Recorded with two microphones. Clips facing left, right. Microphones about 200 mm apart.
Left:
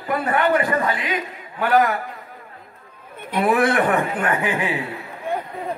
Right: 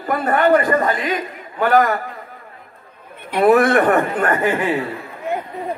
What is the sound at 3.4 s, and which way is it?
A man's voice, 45° right (ahead or behind).